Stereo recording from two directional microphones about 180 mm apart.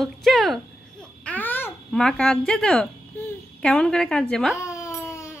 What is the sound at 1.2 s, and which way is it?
Babbling, 10° left (ahead or behind).